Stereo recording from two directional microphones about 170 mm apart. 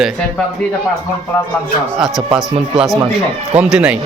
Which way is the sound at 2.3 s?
5° right (ahead or behind).